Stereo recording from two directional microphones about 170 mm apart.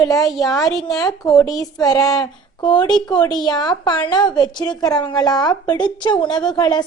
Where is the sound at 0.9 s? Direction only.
20° left (ahead or behind).